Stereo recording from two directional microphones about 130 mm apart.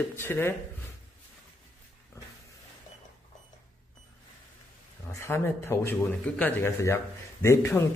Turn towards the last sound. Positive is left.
turn(degrees=20)  # may be behind; listen again after turning